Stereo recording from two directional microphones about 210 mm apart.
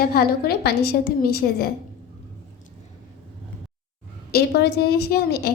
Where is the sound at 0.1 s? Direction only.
50° left (ahead or behind).